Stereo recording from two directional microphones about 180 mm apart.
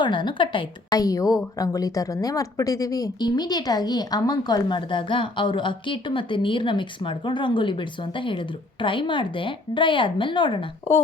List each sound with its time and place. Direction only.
0.0 s a woman's voice: 25° left (ahead or behind)